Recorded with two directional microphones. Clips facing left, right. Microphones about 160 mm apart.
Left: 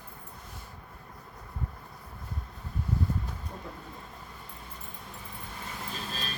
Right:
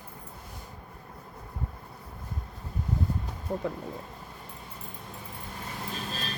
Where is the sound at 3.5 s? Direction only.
80° right.